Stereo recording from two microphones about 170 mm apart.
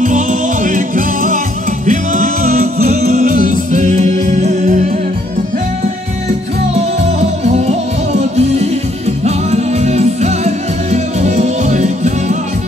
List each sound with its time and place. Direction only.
0.0 s music: 50° right (ahead or behind)
7.1 s music: 40° right (ahead or behind)